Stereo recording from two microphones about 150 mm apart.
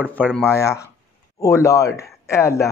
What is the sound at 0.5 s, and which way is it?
Speech, 20° left (ahead or behind).